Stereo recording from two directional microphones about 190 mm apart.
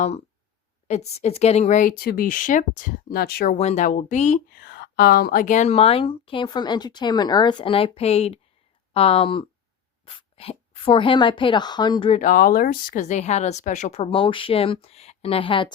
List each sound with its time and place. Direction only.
0.9 s a woman's voice: 35° left (ahead or behind); by 3.6 s 55° left (ahead or behind)
3.6 s speech: 40° left (ahead or behind)
4.5 s a woman's voice: 55° left (ahead or behind); by 12.2 s 25° left (ahead or behind)
12.2 s speech: 50° left (ahead or behind); by 15.7 s 25° left (ahead or behind)